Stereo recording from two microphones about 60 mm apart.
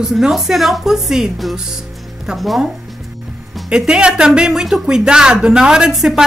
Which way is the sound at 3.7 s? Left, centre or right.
Centre.